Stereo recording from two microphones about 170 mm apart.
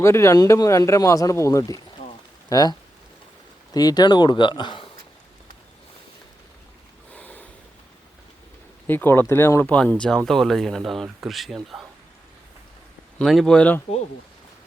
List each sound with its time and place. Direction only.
0.0 s speech: 15° left (ahead or behind)
3.8 s speech: 25° left (ahead or behind)
7.1 s snort: 10° left (ahead or behind)
8.9 s speech: 10° left (ahead or behind)
13.1 s speech: centre (ahead or behind)